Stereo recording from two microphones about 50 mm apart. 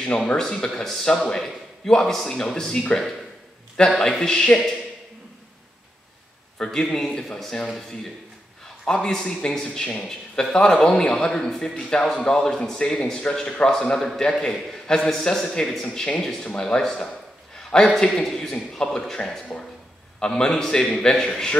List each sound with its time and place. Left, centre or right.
0.3 s a man's voice: centre
4.0 s speech: centre
6.6 s speech: centre
8.8 s speech: centre